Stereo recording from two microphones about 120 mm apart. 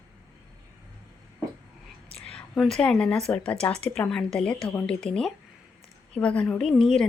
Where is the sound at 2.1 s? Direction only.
10° left (ahead or behind).